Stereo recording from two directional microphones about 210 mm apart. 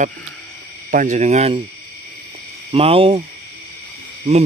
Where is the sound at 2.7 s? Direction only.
25° right (ahead or behind).